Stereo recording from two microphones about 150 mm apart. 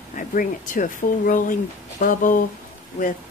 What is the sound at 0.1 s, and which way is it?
A woman's voice, 60° left (ahead or behind).